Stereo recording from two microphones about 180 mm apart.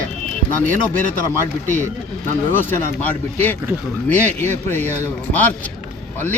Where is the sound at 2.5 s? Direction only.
10° left (ahead or behind).